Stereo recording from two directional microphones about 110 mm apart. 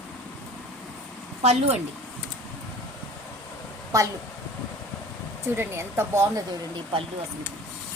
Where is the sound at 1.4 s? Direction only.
70° right (ahead or behind).